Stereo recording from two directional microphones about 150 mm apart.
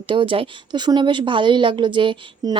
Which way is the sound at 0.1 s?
35° right (ahead or behind).